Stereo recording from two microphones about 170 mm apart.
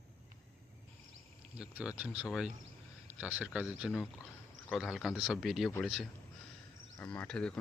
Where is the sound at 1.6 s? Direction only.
5° right (ahead or behind).